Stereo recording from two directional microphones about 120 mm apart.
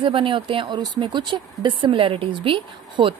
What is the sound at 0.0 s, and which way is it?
Speech, 45° right (ahead or behind).